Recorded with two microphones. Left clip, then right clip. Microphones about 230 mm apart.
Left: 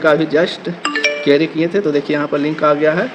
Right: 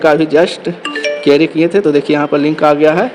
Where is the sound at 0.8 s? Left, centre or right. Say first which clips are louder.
Left 2 dB; centre.